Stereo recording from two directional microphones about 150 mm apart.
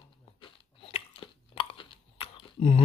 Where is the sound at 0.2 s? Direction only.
35° left (ahead or behind).